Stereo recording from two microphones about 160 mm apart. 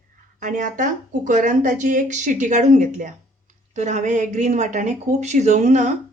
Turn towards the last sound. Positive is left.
turn(degrees=-50)  # may be behind; listen again after turning